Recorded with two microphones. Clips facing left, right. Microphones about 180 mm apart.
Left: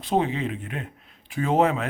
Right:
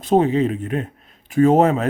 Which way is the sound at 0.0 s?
45° right (ahead or behind).